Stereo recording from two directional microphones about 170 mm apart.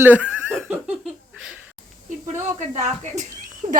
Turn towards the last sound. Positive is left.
turn(degrees=-45)  # may be behind; listen again after turning